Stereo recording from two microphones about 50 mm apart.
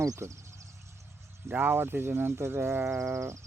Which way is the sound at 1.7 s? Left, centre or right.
Right.